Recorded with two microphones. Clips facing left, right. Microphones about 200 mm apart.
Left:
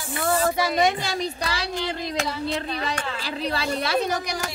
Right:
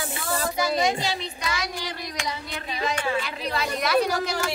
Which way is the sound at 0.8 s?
50° left (ahead or behind).